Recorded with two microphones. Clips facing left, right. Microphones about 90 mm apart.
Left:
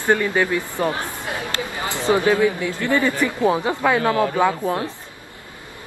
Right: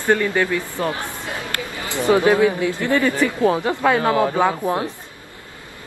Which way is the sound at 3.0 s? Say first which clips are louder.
Right 2 dB; 15° left (ahead or behind).